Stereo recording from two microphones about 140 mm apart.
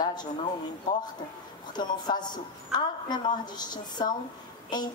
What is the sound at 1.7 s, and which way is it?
A woman's voice, 30° left (ahead or behind).